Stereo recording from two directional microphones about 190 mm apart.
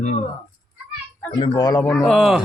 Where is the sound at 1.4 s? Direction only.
20° left (ahead or behind).